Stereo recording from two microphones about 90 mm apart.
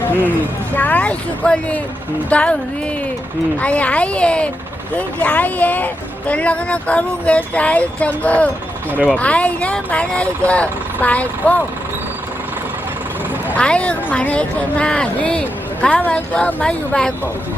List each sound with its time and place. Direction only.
0.8 s speech: 15° left (ahead or behind)
3.6 s speech: 15° left (ahead or behind)
13.5 s speech: 10° left (ahead or behind)